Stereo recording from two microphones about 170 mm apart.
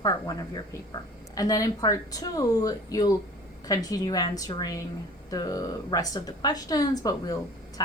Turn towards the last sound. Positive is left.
turn(degrees=20)  # may be behind; listen again after turning